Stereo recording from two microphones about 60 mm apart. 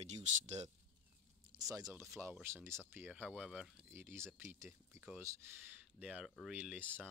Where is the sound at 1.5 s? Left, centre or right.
Right.